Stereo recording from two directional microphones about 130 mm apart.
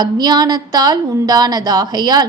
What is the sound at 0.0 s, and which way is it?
A woman's voice, 30° right (ahead or behind).